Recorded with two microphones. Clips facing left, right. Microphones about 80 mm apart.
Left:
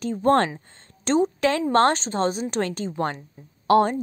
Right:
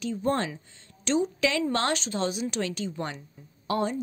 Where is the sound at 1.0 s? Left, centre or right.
Left.